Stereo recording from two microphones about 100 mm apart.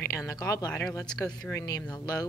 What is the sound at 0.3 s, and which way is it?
Speech, 35° left (ahead or behind).